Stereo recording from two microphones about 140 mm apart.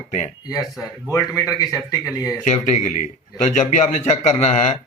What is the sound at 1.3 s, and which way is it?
Speech, 25° left (ahead or behind).